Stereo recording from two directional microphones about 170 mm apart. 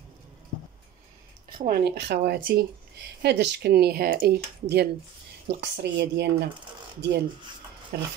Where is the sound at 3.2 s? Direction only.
85° right; by 4.4 s 60° right (ahead or behind).